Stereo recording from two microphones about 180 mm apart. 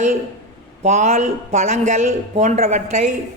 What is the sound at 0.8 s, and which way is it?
A woman's voice, 40° right (ahead or behind).